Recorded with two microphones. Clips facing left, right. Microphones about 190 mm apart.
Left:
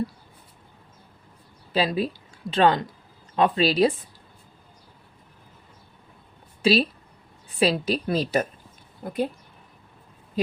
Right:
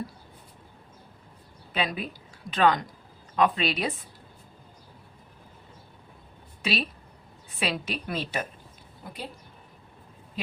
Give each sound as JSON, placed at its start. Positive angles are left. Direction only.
{"t": 1.7, "sound": "a woman's voice", "side_deg": 35}
{"t": 6.6, "sound": "a woman's voice", "side_deg": 35}
{"t": 10.4, "sound": "speech", "side_deg": 40}